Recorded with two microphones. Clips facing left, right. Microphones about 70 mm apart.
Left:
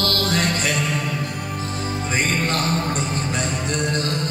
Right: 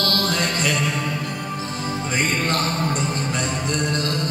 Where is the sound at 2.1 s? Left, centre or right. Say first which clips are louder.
Even; left.